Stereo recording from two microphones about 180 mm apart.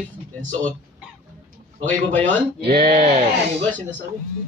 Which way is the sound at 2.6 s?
55° right (ahead or behind).